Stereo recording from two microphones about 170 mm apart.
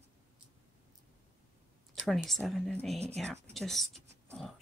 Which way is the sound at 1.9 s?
Centre (ahead or behind).